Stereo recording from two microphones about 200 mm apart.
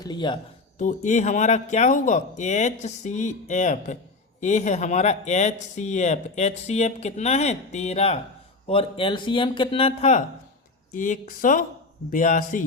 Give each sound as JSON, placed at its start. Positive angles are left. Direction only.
{"t": 0.0, "sound": "speech", "side_deg": 20}
{"t": 0.8, "sound": "speech", "side_deg": 40}